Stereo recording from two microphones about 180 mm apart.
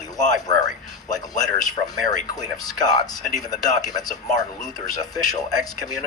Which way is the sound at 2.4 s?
20° left (ahead or behind).